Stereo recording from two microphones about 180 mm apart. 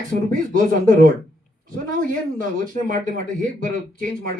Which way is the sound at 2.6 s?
50° right (ahead or behind).